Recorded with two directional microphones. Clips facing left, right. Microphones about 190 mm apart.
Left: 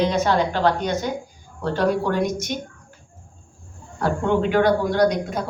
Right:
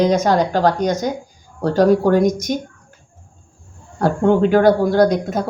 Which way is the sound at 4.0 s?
40° right (ahead or behind).